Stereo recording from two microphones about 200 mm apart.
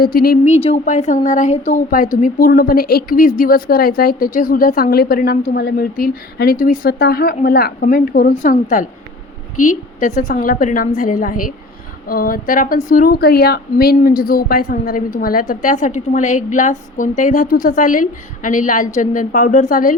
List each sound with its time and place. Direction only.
0.0 s a woman's voice: 50° left (ahead or behind)
0.5 s a woman's voice: 30° left (ahead or behind)
2.2 s a woman's voice: 45° left (ahead or behind)